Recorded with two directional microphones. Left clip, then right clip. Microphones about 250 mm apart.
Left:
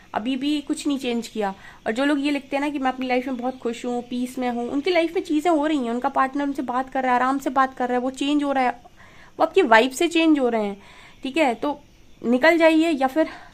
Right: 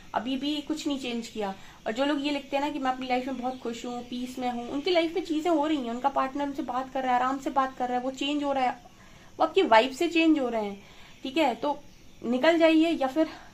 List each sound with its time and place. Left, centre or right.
0.1 s speech: left